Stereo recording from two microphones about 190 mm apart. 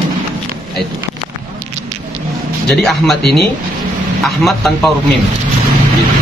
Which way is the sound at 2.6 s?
Centre (ahead or behind).